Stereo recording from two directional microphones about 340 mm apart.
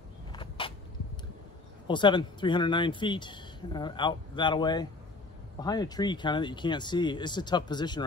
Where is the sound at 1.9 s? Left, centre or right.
Centre.